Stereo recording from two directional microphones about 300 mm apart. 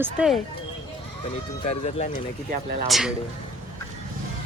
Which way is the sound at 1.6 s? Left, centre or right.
Left.